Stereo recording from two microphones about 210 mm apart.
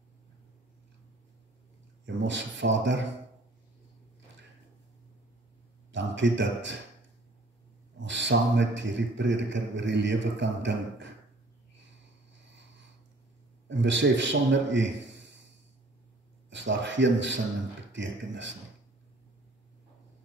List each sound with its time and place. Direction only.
2.2 s a man's voice: 60° right (ahead or behind)
5.9 s a man's voice: 60° right (ahead or behind)
8.0 s a man's voice: 60° right (ahead or behind)
13.7 s a man's voice: 60° right (ahead or behind)
16.4 s a man's voice: 60° right (ahead or behind)